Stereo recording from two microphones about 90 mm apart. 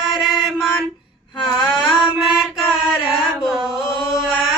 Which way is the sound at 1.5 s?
60° left (ahead or behind).